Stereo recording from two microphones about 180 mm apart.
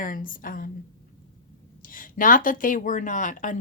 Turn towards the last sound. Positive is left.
turn(degrees=45)  # may be behind; listen again after turning